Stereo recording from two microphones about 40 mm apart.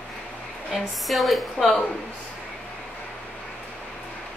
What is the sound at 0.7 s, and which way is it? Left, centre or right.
A woman's voice, centre.